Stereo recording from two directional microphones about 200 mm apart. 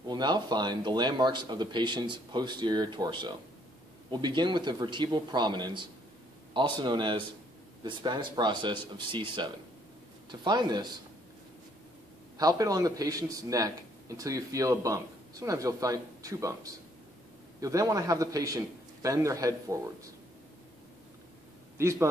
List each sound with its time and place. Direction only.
0.1 s speech: 20° right (ahead or behind)
12.4 s a man's voice: 20° right (ahead or behind)
21.7 s a man's voice: 15° right (ahead or behind)